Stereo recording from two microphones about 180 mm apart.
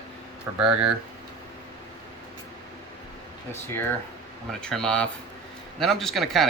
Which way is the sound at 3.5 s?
15° left (ahead or behind).